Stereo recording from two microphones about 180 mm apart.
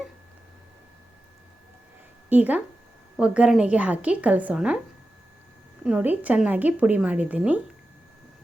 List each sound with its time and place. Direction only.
2.3 s a woman's voice: 10° right (ahead or behind)
5.8 s a woman's voice: 5° right (ahead or behind)